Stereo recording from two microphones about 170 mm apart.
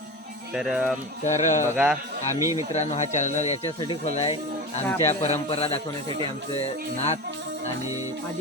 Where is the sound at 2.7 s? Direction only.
40° left (ahead or behind).